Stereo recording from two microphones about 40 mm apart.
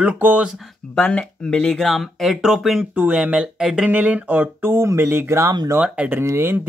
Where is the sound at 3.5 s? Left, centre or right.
Centre.